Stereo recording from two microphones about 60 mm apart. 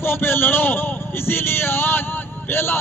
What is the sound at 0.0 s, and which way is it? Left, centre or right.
A man's voice, left.